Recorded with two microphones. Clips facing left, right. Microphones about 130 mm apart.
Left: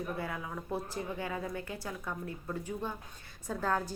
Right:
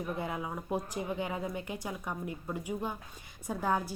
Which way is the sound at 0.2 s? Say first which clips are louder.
Right 2 dB; 20° right (ahead or behind).